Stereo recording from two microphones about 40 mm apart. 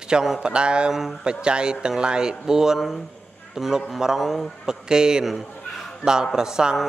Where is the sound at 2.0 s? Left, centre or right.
Right.